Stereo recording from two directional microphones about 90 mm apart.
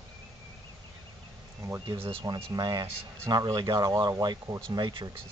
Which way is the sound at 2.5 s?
50° right (ahead or behind).